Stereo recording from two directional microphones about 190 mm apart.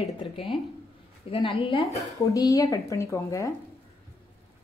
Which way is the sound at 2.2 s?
15° left (ahead or behind).